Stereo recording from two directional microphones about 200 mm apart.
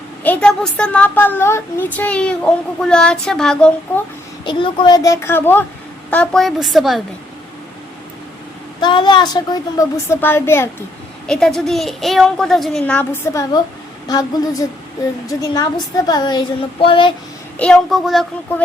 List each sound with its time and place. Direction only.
0.2 s a woman's voice: 5° left (ahead or behind)
4.4 s a woman's voice: 25° left (ahead or behind); by 7.0 s centre (ahead or behind)
8.8 s a woman's voice: 25° left (ahead or behind)
15.3 s a woman's voice: 20° left (ahead or behind)
17.6 s a woman's voice: 5° left (ahead or behind)